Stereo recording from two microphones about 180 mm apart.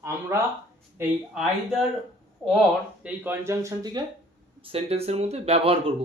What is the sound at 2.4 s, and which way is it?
Speech, 5° left (ahead or behind).